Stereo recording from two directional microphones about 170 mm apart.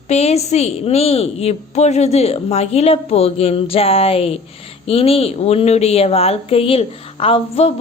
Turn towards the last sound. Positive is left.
turn(degrees=35)  # may be behind; listen again after turning